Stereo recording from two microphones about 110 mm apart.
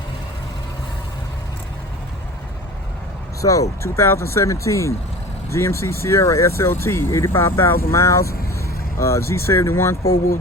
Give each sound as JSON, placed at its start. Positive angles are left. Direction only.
{"t": 3.4, "sound": "speech", "side_deg": 30}